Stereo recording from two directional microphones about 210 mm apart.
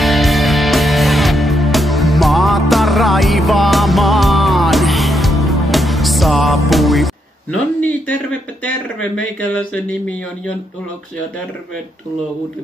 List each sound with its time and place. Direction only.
0.0 s music: centre (ahead or behind)
8.6 s speech: 5° left (ahead or behind)